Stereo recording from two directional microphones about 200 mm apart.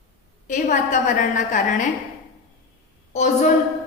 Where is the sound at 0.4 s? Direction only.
40° left (ahead or behind).